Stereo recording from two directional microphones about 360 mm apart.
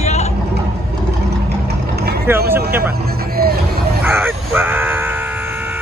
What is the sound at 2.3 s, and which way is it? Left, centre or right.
Vehicle, centre.